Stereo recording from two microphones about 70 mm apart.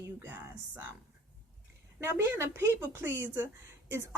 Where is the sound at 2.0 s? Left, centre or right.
Right.